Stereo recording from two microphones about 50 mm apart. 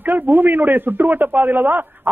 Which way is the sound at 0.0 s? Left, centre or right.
Right.